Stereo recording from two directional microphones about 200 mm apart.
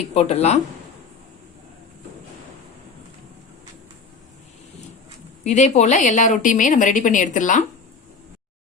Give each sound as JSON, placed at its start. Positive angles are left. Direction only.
{"t": 0.1, "sound": "a woman's voice", "side_deg": 30}
{"t": 5.4, "sound": "a woman's voice", "side_deg": 35}